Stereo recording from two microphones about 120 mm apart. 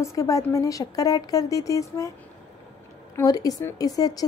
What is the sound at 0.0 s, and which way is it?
A woman's voice, 25° left (ahead or behind).